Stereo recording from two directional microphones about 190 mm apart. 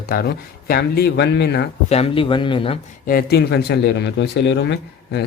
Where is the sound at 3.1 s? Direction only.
55° left (ahead or behind).